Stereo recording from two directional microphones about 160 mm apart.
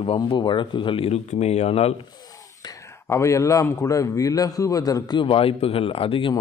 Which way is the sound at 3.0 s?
20° left (ahead or behind).